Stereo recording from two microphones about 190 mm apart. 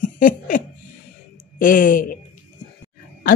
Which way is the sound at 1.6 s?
45° left (ahead or behind).